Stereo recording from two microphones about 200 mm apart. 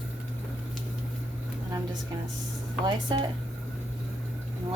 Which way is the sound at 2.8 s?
20° right (ahead or behind).